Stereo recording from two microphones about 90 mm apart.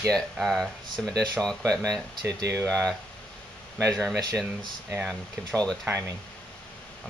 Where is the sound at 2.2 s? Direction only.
40° right (ahead or behind).